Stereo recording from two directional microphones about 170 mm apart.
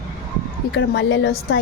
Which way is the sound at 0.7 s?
90° left.